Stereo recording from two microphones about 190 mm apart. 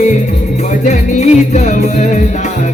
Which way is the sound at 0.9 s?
35° left (ahead or behind).